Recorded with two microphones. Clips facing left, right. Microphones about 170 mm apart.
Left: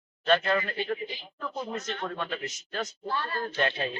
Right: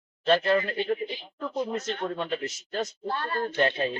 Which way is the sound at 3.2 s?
50° right (ahead or behind).